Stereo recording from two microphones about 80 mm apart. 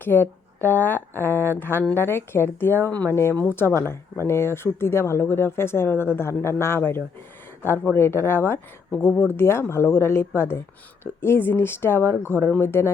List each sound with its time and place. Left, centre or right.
0.0 s speech: left